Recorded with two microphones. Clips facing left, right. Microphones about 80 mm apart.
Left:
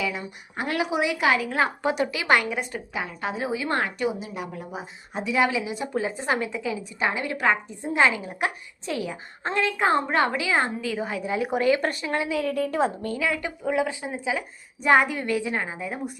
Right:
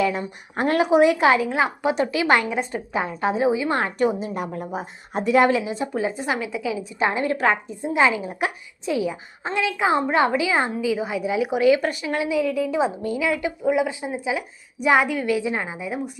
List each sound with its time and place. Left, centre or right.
0.0 s a woman's voice: right
1.5 s a woman's voice: centre
3.8 s a woman's voice: right
5.6 s a woman's voice: right
5.9 s a woman's voice: right
6.3 s speech: centre
7.0 s a woman's voice: right; by 9.5 s centre
9.5 s a woman's voice: centre
10.1 s a woman's voice: centre
10.8 s speech: centre
13.0 s speech: centre
15.3 s speech: centre